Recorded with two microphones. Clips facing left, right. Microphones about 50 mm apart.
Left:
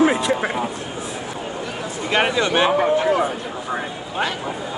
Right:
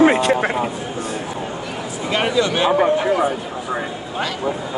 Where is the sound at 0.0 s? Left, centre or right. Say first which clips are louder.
Right 3 dB; right.